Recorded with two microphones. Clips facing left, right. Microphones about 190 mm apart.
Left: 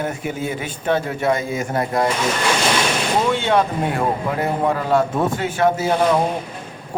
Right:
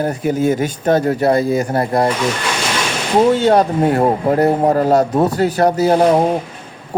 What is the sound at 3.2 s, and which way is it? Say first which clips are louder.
Speech: right 8 dB; 40° right (ahead or behind).